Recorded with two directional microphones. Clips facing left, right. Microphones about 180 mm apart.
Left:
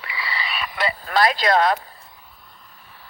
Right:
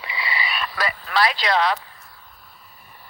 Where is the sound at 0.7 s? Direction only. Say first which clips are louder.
Left 4 dB; 25° left (ahead or behind).